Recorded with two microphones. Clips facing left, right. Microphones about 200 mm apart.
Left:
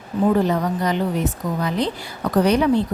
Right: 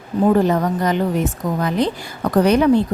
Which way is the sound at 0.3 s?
50° right (ahead or behind).